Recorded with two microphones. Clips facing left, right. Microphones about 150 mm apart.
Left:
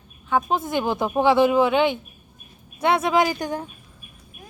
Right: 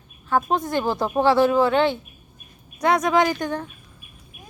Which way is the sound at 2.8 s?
25° left (ahead or behind).